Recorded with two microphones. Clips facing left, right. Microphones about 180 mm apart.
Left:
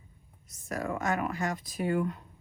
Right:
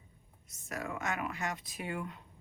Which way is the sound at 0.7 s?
40° left (ahead or behind).